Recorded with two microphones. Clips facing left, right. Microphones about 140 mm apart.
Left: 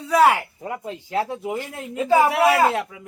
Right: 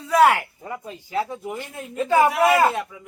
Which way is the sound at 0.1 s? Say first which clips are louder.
Even; 10° left (ahead or behind).